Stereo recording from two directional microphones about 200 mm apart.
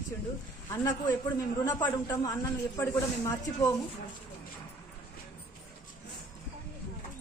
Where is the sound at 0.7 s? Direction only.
15° left (ahead or behind).